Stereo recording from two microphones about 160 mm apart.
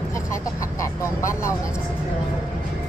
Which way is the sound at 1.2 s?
20° left (ahead or behind).